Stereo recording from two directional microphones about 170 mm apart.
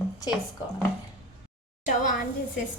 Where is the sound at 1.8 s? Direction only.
50° left (ahead or behind).